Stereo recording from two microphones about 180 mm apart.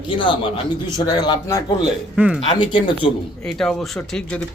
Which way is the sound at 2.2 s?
10° right (ahead or behind).